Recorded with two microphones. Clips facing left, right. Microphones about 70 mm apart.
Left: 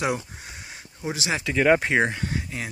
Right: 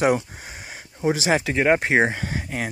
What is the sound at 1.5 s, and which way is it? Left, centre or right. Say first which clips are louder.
Speech: left 2 dB; right.